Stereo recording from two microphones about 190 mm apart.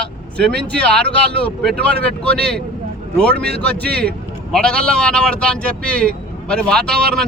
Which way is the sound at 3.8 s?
55° right (ahead or behind).